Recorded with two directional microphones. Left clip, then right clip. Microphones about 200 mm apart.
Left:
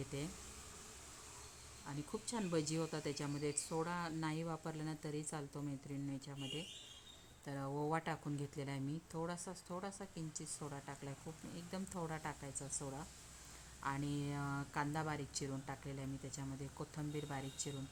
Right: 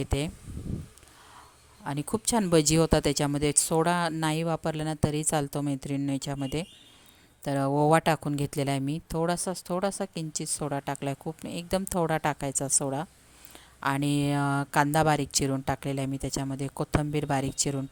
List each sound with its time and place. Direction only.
1.9 s speech: 50° right (ahead or behind)